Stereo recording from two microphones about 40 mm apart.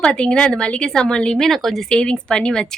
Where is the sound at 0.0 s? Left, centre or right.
Left.